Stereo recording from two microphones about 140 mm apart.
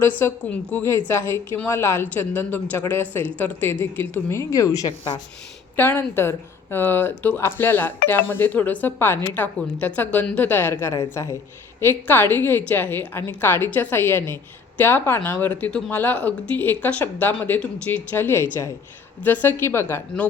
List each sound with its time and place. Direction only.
0.2 s a woman's voice: 15° left (ahead or behind)
5.7 s a woman's voice: 15° left (ahead or behind)